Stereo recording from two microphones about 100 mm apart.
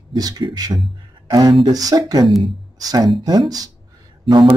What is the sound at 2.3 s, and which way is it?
Speech, centre (ahead or behind).